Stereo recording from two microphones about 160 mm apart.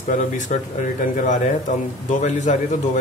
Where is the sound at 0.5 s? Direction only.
50° left (ahead or behind).